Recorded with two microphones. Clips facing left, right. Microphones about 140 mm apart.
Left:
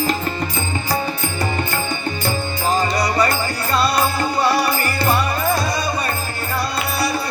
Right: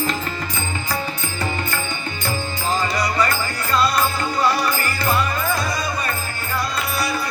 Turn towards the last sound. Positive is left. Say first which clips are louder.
# left 3 dB
turn(degrees=35)  # may be behind; listen again after turning